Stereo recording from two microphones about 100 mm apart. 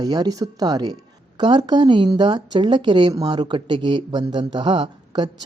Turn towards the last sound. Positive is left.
turn(degrees=-50)  # may be behind; listen again after turning